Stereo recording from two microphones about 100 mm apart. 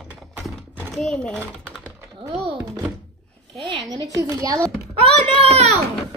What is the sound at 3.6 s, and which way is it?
A woman's voice, 50° right (ahead or behind).